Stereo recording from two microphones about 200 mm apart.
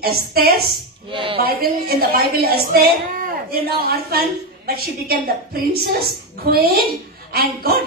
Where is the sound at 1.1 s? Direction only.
25° right (ahead or behind).